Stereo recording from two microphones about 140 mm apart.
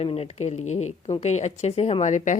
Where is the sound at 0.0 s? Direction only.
45° left (ahead or behind).